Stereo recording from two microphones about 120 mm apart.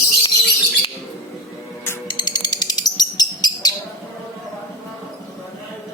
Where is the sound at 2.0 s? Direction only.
35° left (ahead or behind).